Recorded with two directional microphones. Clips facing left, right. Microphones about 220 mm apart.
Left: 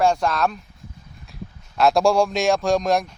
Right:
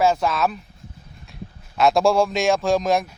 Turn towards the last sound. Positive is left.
turn(degrees=0)  # may be behind; listen again after turning